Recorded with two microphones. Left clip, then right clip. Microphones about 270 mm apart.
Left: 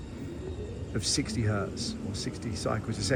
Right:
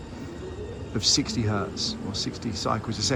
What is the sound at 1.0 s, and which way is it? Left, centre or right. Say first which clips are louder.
Speech: right 7 dB; centre.